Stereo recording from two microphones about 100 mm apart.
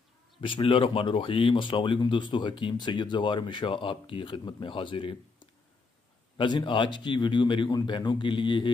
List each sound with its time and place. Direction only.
0.4 s a man's voice: 60° left (ahead or behind)